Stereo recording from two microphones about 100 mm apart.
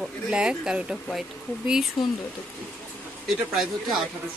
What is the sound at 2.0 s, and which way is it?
Speech, 45° left (ahead or behind).